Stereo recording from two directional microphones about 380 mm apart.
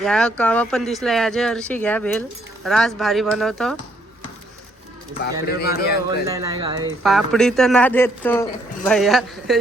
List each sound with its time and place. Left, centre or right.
0.0 s speech: centre
5.5 s a man's voice: left
6.1 s speech: centre
7.0 s speech: centre